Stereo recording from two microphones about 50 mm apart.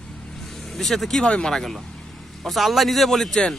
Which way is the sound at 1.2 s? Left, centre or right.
Centre.